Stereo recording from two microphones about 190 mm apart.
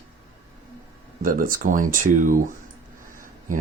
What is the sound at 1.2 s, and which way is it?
Speech, 45° right (ahead or behind).